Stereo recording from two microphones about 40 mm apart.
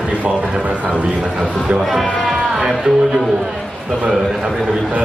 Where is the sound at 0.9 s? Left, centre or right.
Right.